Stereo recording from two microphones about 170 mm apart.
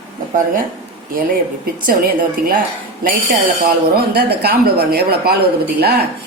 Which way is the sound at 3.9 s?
65° right (ahead or behind).